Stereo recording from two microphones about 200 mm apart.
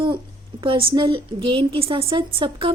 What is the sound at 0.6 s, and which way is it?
A woman's voice, 25° right (ahead or behind).